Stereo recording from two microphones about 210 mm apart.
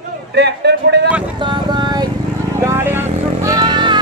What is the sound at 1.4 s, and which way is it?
Vehicle, 20° right (ahead or behind).